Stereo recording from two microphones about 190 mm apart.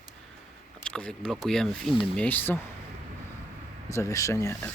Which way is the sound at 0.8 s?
5° left (ahead or behind).